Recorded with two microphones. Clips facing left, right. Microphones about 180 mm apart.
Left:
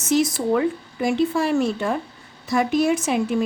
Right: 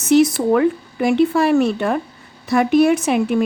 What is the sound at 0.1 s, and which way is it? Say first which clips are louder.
A woman's voice: right 6 dB; 65° right (ahead or behind).